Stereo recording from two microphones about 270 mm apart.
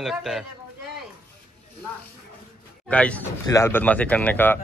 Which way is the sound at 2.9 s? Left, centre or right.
Centre.